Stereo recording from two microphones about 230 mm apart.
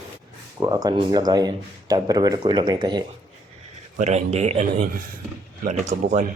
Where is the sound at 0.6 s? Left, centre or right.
Centre.